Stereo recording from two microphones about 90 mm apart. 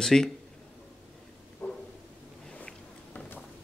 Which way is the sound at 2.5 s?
10° left (ahead or behind).